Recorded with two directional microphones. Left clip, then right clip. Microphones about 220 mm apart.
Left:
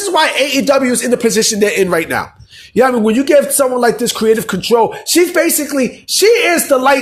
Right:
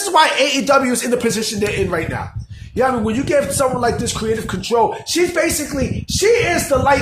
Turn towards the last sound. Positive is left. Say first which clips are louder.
# left 5 dB
turn(degrees=35)  # may be behind; listen again after turning